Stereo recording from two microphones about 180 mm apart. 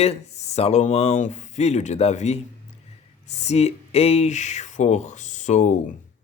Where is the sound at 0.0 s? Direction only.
35° left (ahead or behind).